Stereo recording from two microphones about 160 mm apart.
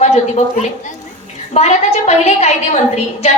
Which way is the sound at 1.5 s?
45° left (ahead or behind).